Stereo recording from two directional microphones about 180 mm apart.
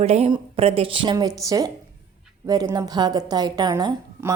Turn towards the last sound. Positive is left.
turn(degrees=-20)  # may be behind; listen again after turning